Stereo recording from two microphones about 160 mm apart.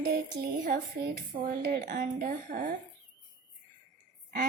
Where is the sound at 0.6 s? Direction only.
60° right (ahead or behind).